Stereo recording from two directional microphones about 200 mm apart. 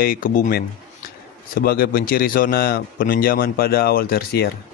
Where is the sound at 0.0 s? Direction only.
45° left (ahead or behind).